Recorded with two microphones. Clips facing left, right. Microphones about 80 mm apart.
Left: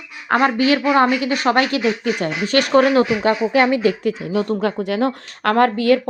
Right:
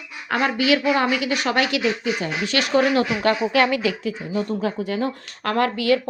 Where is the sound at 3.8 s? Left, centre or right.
Left.